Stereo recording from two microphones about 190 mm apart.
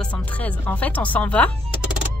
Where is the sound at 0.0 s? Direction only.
5° left (ahead or behind).